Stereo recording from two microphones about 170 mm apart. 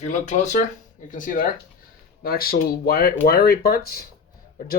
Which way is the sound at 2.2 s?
60° left (ahead or behind).